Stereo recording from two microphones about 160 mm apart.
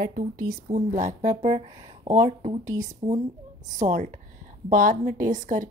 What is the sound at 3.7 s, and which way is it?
A woman's voice, 50° right (ahead or behind).